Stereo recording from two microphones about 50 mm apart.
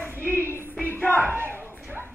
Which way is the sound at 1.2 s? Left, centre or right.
Right.